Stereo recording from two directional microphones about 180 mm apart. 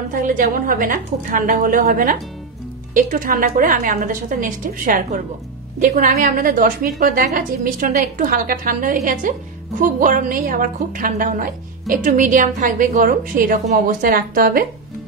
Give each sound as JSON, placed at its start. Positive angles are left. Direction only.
{"t": 0.1, "sound": "a woman's voice", "side_deg": -50}